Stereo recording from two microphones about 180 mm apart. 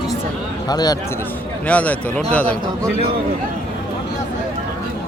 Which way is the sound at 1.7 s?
10° left (ahead or behind).